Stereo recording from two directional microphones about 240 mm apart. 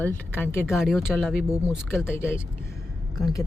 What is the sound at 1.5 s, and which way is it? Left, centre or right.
Speech, centre.